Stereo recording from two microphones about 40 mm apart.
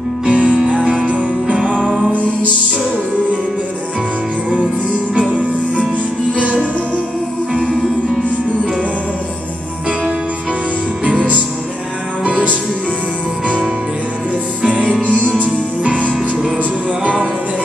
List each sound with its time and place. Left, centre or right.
0.3 s music: right
0.6 s music: centre
1.0 s music: right
2.1 s music: left
5.1 s music: right
6.4 s music: right
12.3 s music: right
15.3 s music: right